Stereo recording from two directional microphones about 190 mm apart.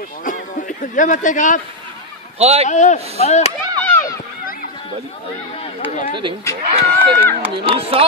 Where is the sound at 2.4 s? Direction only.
35° right (ahead or behind).